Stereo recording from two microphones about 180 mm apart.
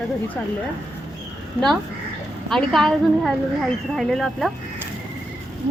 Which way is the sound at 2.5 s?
Centre (ahead or behind).